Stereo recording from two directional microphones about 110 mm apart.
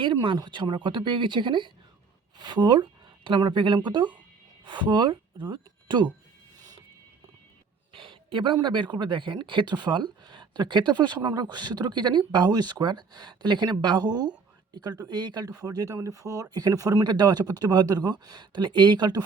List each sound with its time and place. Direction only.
0.0 s speech: 50° right (ahead or behind)
7.9 s speech: 50° right (ahead or behind)